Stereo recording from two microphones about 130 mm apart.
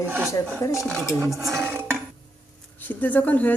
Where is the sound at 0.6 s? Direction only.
20° left (ahead or behind).